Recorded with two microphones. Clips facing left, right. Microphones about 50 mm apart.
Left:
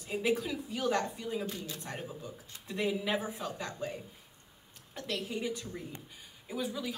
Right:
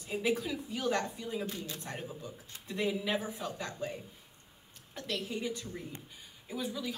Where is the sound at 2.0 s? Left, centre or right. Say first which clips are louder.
Even; centre; by 5.2 s left.